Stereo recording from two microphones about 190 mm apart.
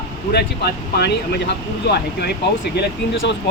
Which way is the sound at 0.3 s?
60° left (ahead or behind).